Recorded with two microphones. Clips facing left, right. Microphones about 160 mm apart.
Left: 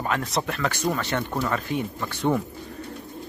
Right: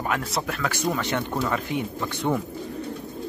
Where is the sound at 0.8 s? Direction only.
15° right (ahead or behind).